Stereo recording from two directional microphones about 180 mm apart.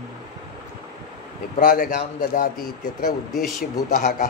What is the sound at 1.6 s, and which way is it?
Speech, 50° left (ahead or behind).